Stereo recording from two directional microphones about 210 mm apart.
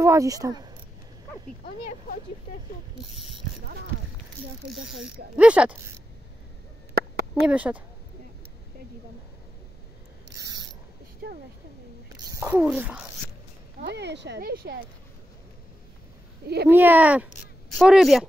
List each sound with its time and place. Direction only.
0.0 s speech: 15° right (ahead or behind)
4.6 s speech: centre (ahead or behind)
7.0 s a sound: 50° right (ahead or behind)
7.4 s speech: 5° right (ahead or behind)
10.3 s mechanisms: 15° right (ahead or behind)
11.2 s a sound: 50° right (ahead or behind)
12.3 s speech: 10° right (ahead or behind)
13.7 s speech: 55° right (ahead or behind)
16.6 s speech: 10° right (ahead or behind)